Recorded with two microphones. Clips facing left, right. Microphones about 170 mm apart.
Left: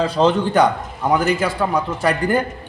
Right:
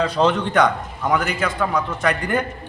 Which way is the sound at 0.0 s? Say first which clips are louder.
Left 2 dB; 30° left (ahead or behind).